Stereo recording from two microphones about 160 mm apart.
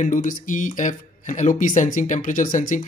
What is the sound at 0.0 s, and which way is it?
Speech, 55° left (ahead or behind).